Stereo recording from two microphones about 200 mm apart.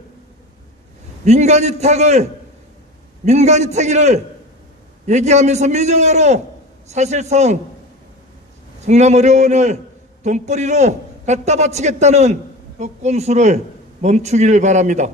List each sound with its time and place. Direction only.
1.2 s a man's voice: 35° right (ahead or behind)
3.3 s a man's voice: 35° right (ahead or behind)
8.8 s a man's voice: 35° right (ahead or behind)